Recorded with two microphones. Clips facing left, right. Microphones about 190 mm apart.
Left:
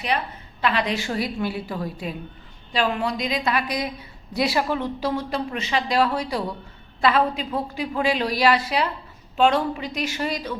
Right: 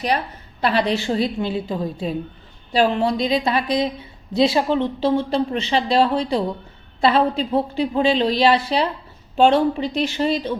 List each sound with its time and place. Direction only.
0.6 s speech: 35° right (ahead or behind)